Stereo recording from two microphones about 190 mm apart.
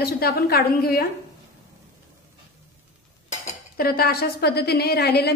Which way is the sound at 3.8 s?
55° left (ahead or behind).